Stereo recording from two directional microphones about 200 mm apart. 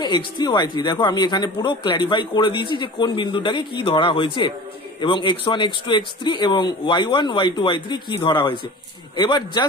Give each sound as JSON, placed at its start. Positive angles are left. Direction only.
{"t": 0.0, "sound": "a man's voice", "side_deg": 20}